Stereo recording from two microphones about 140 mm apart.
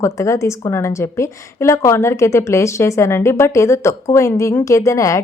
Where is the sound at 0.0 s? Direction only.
20° left (ahead or behind).